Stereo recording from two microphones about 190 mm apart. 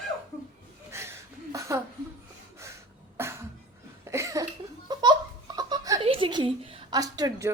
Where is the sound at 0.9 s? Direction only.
15° right (ahead or behind).